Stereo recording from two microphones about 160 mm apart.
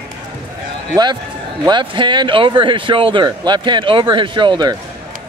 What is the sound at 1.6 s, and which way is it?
Speech, 30° right (ahead or behind).